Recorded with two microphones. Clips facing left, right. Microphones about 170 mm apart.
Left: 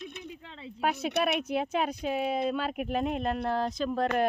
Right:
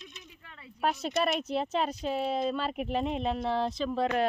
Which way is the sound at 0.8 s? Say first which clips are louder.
Left 1 dB; centre (ahead or behind).